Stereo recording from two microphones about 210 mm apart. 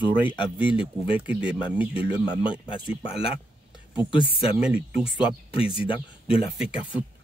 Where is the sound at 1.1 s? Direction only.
5° right (ahead or behind).